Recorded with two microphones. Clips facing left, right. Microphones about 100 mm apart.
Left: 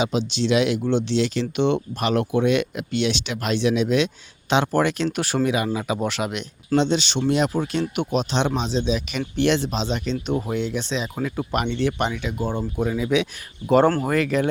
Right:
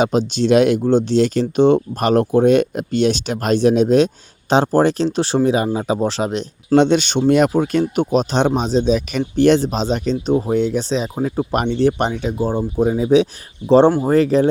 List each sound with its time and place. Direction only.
0.0 s speech: 45° right (ahead or behind)
6.7 s speech: 55° right (ahead or behind); by 14.5 s 30° right (ahead or behind)